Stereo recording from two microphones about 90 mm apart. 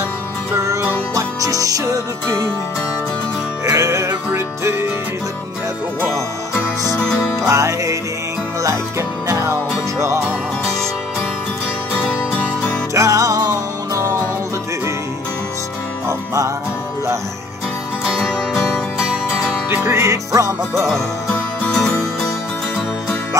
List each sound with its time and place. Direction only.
1.1 s music: 40° right (ahead or behind)
3.6 s music: 35° right (ahead or behind)
7.4 s music: 35° right (ahead or behind)
9.3 s music: 30° right (ahead or behind)
12.9 s music: 35° right (ahead or behind)
16.1 s music: 35° right (ahead or behind)
18.0 s music: 5° left (ahead or behind)
19.7 s music: 25° right (ahead or behind)
21.6 s music: 5° left (ahead or behind)